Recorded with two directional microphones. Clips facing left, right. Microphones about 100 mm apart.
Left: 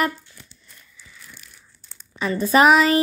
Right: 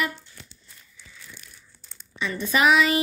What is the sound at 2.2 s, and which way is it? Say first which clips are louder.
Child singing: left 6 dB; 40° left (ahead or behind).